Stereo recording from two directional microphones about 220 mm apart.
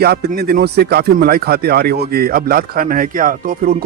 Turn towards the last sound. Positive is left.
turn(degrees=-40)  # may be behind; listen again after turning